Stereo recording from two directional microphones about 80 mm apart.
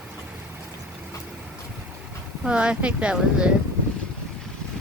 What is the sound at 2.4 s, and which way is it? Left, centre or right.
Speech, centre.